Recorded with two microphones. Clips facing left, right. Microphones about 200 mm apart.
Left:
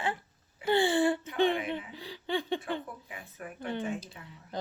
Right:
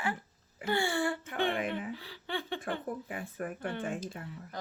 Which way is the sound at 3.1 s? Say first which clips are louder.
Right 6 dB; 50° right (ahead or behind).